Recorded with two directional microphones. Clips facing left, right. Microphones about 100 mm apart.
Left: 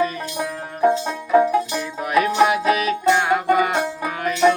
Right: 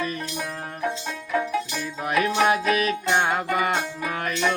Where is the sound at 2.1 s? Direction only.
30° left (ahead or behind).